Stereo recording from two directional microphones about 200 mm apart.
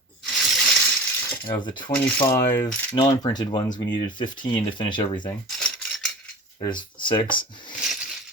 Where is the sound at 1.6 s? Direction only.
20° left (ahead or behind).